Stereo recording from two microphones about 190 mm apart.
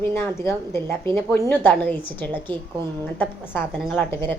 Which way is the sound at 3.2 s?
10° left (ahead or behind).